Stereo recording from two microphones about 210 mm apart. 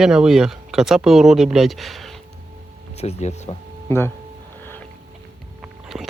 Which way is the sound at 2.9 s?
30° left (ahead or behind).